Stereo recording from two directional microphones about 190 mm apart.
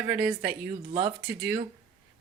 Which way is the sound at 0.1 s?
10° right (ahead or behind).